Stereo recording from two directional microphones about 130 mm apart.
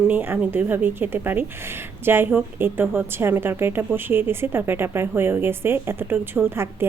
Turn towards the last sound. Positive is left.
turn(degrees=-20)  # may be behind; listen again after turning